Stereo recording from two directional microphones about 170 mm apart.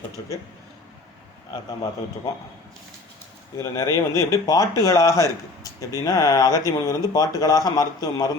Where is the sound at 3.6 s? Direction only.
20° left (ahead or behind).